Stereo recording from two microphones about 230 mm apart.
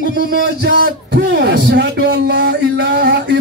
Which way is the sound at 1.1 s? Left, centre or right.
Right.